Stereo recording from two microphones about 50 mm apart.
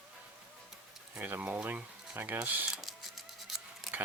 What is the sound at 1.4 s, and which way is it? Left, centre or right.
Speech, right.